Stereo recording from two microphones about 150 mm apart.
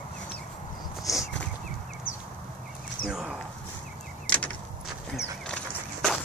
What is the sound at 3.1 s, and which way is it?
Speech, 5° right (ahead or behind).